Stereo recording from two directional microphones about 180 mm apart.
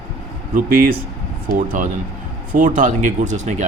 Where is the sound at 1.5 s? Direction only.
50° right (ahead or behind).